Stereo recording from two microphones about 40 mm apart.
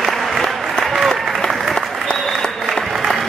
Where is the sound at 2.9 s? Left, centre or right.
Centre.